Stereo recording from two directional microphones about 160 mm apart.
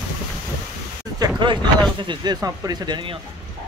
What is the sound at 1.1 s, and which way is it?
Speech, 30° right (ahead or behind).